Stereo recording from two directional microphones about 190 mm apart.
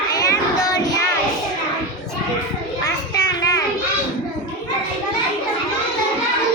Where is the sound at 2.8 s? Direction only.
20° left (ahead or behind).